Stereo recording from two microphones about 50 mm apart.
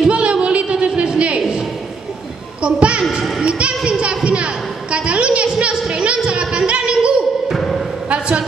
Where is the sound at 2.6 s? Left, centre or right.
Right.